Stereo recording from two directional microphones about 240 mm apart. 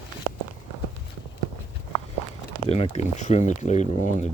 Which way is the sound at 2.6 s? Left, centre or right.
Left.